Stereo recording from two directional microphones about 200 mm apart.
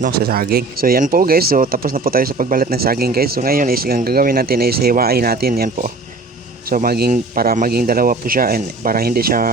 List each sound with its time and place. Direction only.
0.0 s speech: 50° right (ahead or behind)